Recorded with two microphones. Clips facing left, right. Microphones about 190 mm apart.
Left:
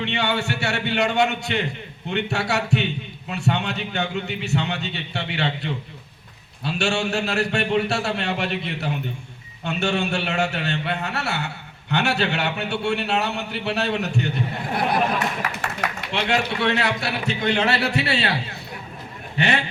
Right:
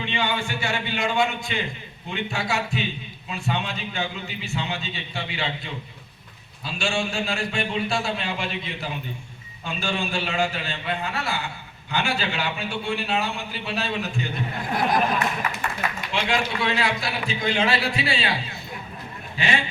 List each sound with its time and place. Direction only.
0.0 s a man's voice: 70° left (ahead or behind)
15.4 s a man's voice: 75° left (ahead or behind)
19.4 s a man's voice: 65° left (ahead or behind)